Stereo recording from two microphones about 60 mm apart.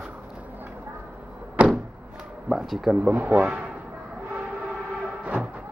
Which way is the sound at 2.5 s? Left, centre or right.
Centre.